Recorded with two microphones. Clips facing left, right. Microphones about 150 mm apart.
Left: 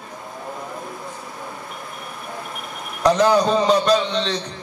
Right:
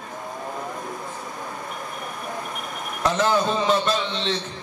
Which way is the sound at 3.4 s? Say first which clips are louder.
Left 4 dB; 40° left (ahead or behind).